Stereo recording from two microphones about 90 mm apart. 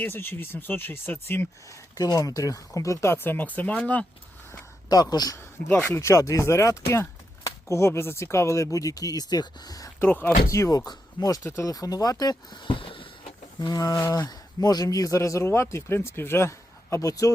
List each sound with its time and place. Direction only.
0.0 s speech: 25° left (ahead or behind)
1.7 s speech: 45° left (ahead or behind); by 4.0 s 15° left (ahead or behind)
4.9 s speech: 45° left (ahead or behind)
5.8 s speech: 30° left (ahead or behind)
10.0 s speech: 20° left (ahead or behind)
10.5 s speech: 40° left (ahead or behind)
11.4 s speech: 30° left (ahead or behind)
11.7 s speech: 45° left (ahead or behind); by 13.1 s 75° left (ahead or behind)
13.6 s speech: 45° left (ahead or behind)